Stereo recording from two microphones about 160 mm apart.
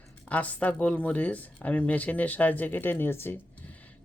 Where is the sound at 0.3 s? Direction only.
10° left (ahead or behind).